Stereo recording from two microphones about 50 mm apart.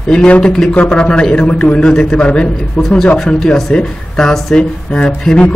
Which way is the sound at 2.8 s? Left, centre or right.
Centre.